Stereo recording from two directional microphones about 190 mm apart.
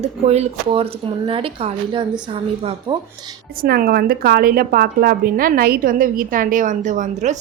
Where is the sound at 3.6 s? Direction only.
50° right (ahead or behind).